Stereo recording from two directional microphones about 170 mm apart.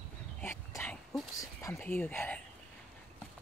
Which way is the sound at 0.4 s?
15° left (ahead or behind).